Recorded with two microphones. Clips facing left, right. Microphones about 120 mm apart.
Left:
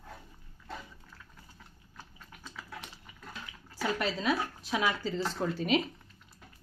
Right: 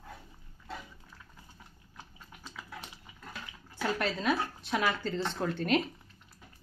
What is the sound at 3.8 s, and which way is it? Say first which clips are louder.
Speech: even; centre (ahead or behind).